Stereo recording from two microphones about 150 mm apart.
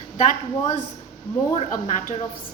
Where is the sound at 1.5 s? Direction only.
60° left (ahead or behind).